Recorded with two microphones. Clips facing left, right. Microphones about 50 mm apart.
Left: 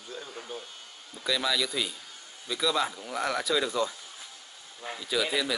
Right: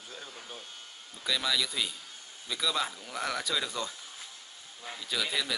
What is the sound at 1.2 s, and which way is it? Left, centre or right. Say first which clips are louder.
A man's voice: left 2 dB; centre.